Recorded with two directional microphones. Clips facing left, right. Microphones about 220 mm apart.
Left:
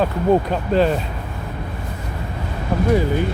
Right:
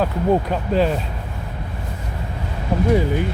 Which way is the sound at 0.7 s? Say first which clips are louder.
Left 2 dB; 5° right (ahead or behind).